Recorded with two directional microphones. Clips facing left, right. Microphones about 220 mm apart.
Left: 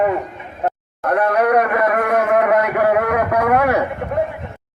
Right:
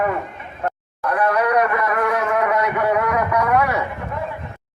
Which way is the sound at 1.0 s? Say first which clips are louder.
Left 3 dB; 50° left (ahead or behind).